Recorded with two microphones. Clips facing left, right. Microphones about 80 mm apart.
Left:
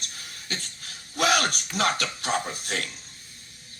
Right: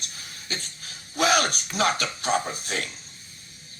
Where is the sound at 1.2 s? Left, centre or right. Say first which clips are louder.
Right 1 dB; right.